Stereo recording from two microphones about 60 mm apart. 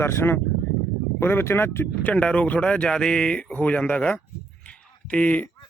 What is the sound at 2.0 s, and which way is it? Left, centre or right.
Speech, left.